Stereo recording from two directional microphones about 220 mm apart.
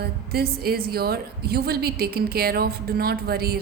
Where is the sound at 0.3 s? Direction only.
45° right (ahead or behind).